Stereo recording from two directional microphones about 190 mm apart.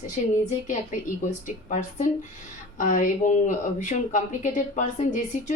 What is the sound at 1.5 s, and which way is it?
Speech, 40° left (ahead or behind).